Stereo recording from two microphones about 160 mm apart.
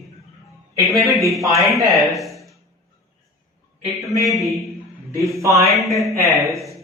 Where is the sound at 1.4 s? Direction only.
20° right (ahead or behind).